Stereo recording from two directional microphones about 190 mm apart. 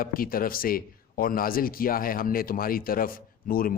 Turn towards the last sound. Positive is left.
turn(degrees=50)  # may be behind; listen again after turning